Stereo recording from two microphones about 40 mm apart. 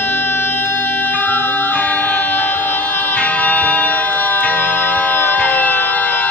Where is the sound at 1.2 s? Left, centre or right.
Left.